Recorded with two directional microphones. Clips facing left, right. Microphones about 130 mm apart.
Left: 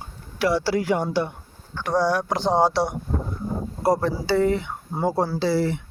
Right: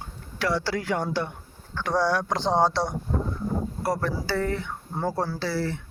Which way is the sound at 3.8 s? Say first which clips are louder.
Left 8 dB; 15° left (ahead or behind).